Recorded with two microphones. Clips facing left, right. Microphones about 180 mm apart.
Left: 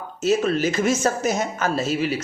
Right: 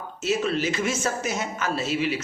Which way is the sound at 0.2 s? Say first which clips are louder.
Left 5 dB; 45° left (ahead or behind).